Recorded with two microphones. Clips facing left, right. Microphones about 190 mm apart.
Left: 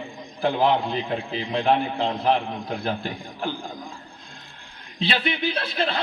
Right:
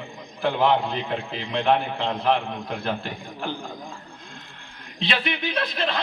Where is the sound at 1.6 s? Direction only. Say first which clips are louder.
Even; 30° left (ahead or behind).